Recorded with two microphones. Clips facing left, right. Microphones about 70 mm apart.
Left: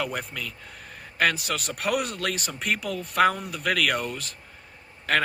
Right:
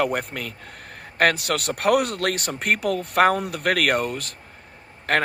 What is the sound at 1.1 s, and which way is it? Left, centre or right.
Speech, right.